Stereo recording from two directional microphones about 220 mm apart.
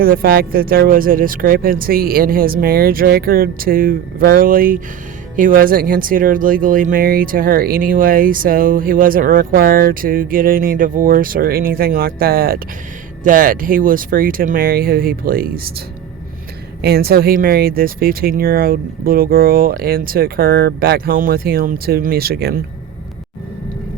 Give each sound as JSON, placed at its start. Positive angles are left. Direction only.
{"t": 0.0, "sound": "speech", "side_deg": -40}
{"t": 16.8, "sound": "speech", "side_deg": -45}